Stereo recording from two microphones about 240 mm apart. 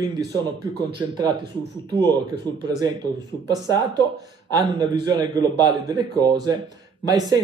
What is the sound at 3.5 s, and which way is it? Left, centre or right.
A man's voice, centre.